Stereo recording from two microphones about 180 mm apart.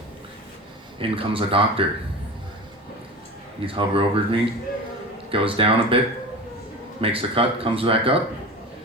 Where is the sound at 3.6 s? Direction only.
30° right (ahead or behind).